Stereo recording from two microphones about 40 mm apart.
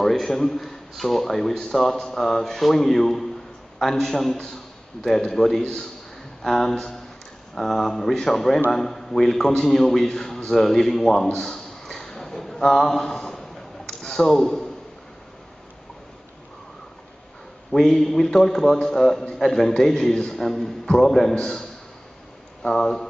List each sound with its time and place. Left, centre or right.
0.0 s a man's voice: centre
11.3 s a sound: centre
14.3 s a man's voice: centre
17.7 s a man's voice: centre